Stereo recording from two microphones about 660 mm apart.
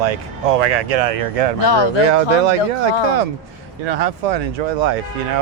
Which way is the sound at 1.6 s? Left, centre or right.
Left.